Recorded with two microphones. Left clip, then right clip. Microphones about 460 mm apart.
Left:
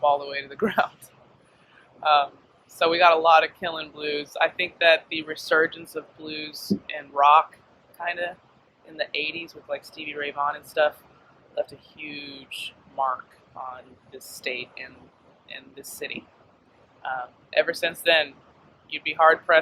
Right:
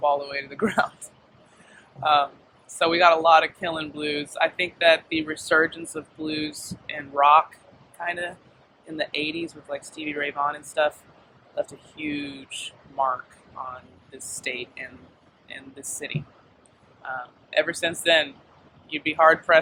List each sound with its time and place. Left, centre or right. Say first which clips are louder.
0.0 s speech: left 1 dB; right
2.0 s speech: even; right
14.2 s speech: even; right